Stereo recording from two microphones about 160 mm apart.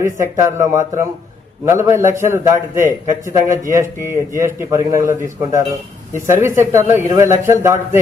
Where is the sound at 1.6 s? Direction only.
15° right (ahead or behind).